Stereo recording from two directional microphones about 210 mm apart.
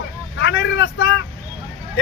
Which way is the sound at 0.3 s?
55° left (ahead or behind).